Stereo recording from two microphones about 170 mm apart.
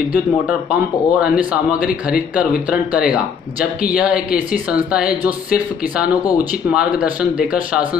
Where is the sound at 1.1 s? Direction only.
5° right (ahead or behind).